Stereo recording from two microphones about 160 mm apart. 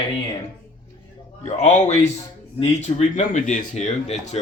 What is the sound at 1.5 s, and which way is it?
Speech, 45° left (ahead or behind).